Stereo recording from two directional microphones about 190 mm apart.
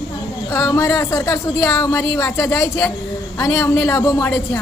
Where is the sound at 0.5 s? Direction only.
15° left (ahead or behind).